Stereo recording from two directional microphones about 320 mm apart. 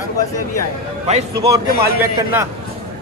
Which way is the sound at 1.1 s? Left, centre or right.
Centre.